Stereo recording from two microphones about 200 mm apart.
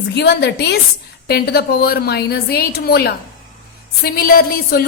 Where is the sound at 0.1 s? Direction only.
60° left (ahead or behind).